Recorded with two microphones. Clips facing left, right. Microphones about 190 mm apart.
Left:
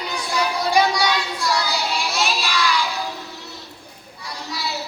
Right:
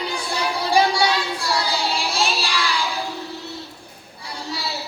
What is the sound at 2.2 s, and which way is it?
Child singing, 30° right (ahead or behind).